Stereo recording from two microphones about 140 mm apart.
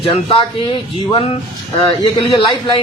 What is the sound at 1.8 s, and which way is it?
Speech, 35° left (ahead or behind).